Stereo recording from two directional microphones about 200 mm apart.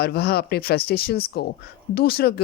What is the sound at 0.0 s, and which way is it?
Speech, 50° left (ahead or behind).